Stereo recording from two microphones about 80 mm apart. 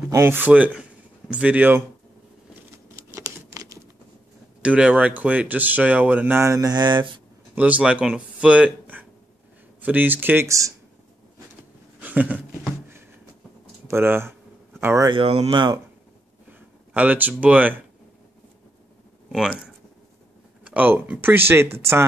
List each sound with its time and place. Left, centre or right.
0.1 s speech: right
0.5 s speech: centre
3.1 s a sound: right
4.6 s speech: centre
6.4 s speech: right
6.7 s speech: right
7.5 s speech: centre
12.0 s a sound: centre
13.8 s speech: right
15.0 s speech: right
16.5 s speech: centre
20.6 s speech: centre